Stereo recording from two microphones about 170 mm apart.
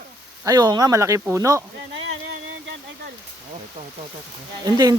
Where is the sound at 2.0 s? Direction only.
85° right.